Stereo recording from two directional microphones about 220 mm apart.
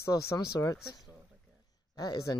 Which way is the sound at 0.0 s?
10° left (ahead or behind).